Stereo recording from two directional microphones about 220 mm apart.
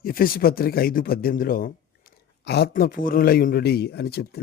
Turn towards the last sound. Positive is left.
turn(degrees=45)  # may be behind; listen again after turning